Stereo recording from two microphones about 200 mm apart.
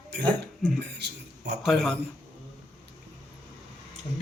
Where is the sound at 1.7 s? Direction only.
Centre (ahead or behind).